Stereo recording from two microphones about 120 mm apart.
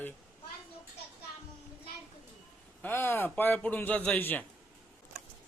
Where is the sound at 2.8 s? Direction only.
20° left (ahead or behind).